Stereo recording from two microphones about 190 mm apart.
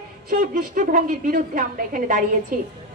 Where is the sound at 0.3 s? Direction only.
45° right (ahead or behind).